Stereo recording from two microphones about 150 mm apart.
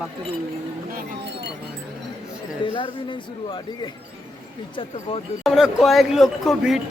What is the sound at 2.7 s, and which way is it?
Speech, 35° left (ahead or behind).